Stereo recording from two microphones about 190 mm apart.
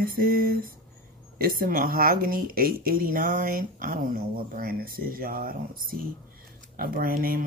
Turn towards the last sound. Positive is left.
turn(degrees=-50)  # may be behind; listen again after turning